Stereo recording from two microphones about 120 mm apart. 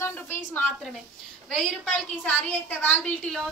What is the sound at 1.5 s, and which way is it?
A woman's voice, 5° left (ahead or behind).